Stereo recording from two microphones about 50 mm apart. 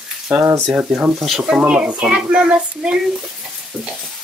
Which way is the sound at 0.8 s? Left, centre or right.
Right.